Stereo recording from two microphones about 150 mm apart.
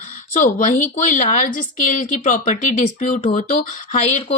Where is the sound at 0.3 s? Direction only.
60° left (ahead or behind).